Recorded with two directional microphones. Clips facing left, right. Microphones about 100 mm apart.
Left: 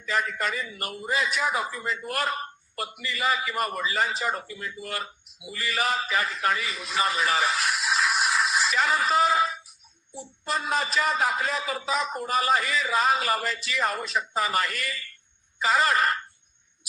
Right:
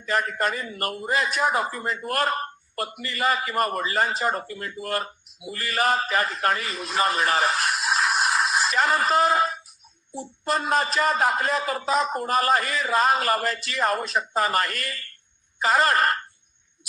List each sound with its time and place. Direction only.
0.0 s a man's voice: 45° right (ahead or behind)